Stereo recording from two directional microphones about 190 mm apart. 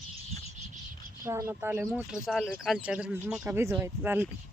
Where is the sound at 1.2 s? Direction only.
15° right (ahead or behind).